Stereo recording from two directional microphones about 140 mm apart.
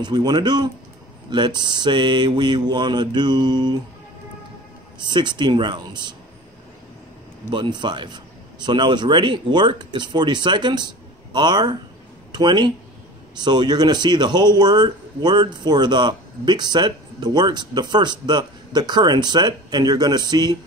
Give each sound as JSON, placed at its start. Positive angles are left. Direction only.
{"t": 0.0, "sound": "speech", "side_deg": -30}
{"t": 4.9, "sound": "speech", "side_deg": -30}
{"t": 7.5, "sound": "speech", "side_deg": -35}